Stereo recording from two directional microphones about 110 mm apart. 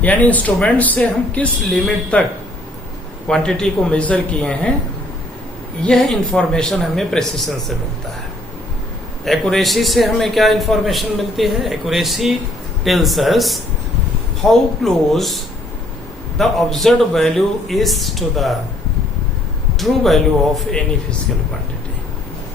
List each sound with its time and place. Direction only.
0.0 s speech: 15° left (ahead or behind)
3.2 s speech: 5° left (ahead or behind)
5.8 s a man's voice: 5° left (ahead or behind)
9.2 s a man's voice: 5° left (ahead or behind)
16.4 s a man's voice: centre (ahead or behind)
19.8 s a man's voice: centre (ahead or behind)